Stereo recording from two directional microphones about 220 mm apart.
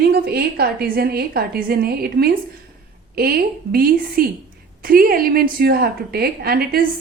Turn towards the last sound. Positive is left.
turn(degrees=-45)  # may be behind; listen again after turning